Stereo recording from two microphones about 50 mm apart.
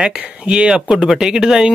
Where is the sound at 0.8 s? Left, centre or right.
Centre.